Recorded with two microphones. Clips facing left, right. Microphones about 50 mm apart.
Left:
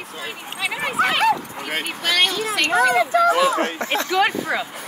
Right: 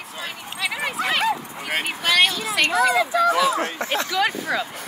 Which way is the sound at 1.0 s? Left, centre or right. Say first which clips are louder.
Left 6 dB; left.